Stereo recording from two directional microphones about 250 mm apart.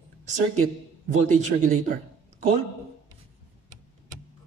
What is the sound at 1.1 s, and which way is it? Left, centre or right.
Speech, right.